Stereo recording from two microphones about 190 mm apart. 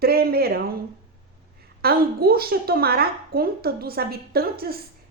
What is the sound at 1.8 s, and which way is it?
A woman's voice, 55° right (ahead or behind).